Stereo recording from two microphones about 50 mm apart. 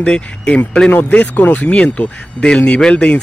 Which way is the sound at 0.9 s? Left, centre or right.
Left.